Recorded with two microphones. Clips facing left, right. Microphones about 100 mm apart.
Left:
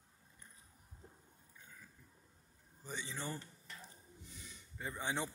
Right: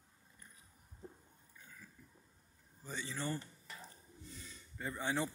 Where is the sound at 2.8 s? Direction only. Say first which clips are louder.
Right 3 dB; 20° left (ahead or behind).